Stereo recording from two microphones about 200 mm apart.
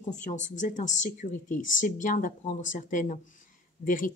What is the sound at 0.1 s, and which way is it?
Speech, 40° left (ahead or behind).